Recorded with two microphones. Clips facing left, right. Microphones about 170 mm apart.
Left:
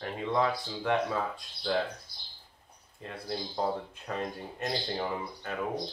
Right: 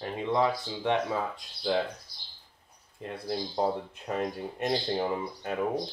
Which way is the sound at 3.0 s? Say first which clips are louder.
Right 3 dB; 15° right (ahead or behind).